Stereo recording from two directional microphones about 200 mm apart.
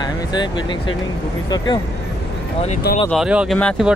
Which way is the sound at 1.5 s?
20° left (ahead or behind).